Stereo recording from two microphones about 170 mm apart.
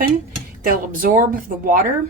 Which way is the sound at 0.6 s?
55° right (ahead or behind).